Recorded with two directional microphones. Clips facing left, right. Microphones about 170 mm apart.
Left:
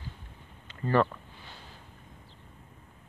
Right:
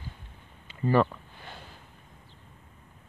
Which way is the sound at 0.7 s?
10° right (ahead or behind).